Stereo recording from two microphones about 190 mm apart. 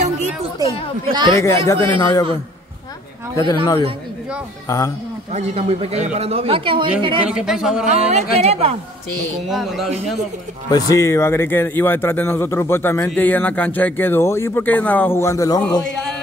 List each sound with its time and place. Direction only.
1.0 s speech: 25° right (ahead or behind)
1.3 s a man's voice: 15° left (ahead or behind)
3.3 s a man's voice: 20° left (ahead or behind)
5.3 s speech: 30° right (ahead or behind)
7.2 s speech: 5° right (ahead or behind)
7.8 s speech: 35° right (ahead or behind)
9.5 s speech: centre (ahead or behind)
10.7 s a man's voice: 15° left (ahead or behind)
15.8 s music: 5° left (ahead or behind)